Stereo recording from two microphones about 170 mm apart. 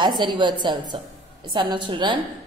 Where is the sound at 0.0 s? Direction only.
25° right (ahead or behind).